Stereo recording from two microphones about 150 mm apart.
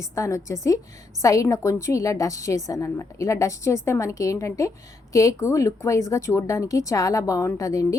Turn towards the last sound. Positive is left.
turn(degrees=20)  # may be behind; listen again after turning